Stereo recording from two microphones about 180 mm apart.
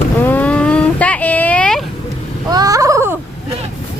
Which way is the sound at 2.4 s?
20° right (ahead or behind).